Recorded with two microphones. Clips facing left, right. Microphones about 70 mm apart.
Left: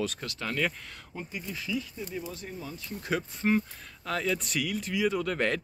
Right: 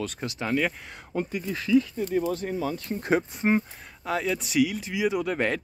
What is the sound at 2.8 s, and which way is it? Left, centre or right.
Speech, right.